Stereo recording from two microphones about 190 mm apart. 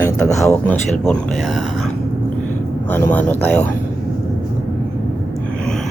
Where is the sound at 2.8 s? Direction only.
10° left (ahead or behind).